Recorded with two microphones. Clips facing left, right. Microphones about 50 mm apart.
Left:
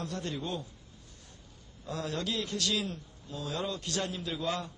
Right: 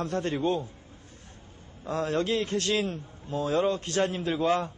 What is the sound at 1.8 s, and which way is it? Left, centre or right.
A man's voice, right.